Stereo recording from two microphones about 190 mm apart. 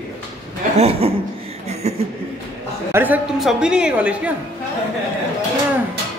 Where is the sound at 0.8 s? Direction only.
30° right (ahead or behind).